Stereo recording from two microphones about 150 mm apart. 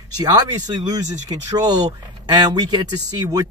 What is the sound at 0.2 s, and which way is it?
Speech, 30° right (ahead or behind).